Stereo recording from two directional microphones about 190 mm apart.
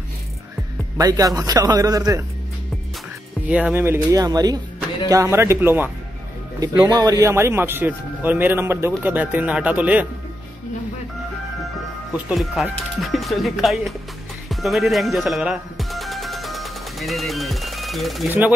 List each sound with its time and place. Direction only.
0.9 s speech: 20° right (ahead or behind)
3.4 s speech: 5° right (ahead or behind)
6.9 s speech: 20° right (ahead or behind)
12.1 s speech: 5° right (ahead or behind)
14.5 s music: centre (ahead or behind)